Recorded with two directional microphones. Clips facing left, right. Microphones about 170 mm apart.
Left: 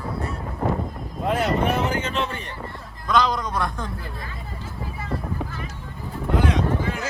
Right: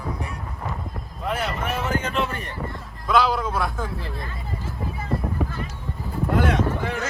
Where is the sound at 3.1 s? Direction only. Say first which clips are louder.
Right 1 dB; 5° right (ahead or behind).